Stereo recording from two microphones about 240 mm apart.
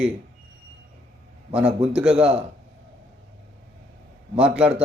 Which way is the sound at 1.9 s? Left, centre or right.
Centre.